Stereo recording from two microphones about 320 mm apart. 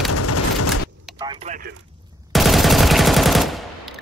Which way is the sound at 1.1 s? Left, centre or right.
Centre.